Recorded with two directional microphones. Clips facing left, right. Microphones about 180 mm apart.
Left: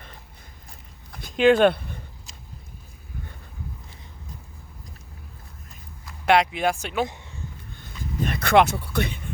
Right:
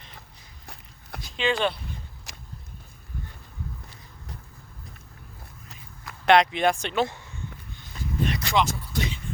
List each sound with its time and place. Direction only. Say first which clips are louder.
1.2 s a sound: left 9 dB; 55° left (ahead or behind)
2.3 s vehicle: right 2 dB; 80° right
6.2 s speech: right 1 dB; 5° left (ahead or behind)
8.2 s speech: left 6 dB; 55° left (ahead or behind)